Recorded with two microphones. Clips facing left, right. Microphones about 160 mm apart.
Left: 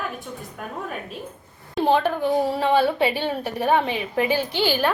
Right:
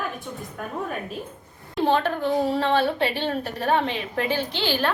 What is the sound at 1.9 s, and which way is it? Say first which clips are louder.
A woman's voice: left 2 dB; 10° left (ahead or behind).